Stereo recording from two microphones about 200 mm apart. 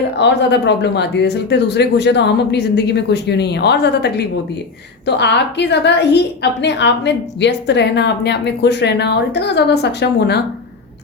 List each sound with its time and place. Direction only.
0.2 s a woman's voice: 60° left (ahead or behind)